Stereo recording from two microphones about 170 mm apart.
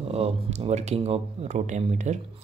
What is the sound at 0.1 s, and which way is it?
Speech, 35° right (ahead or behind).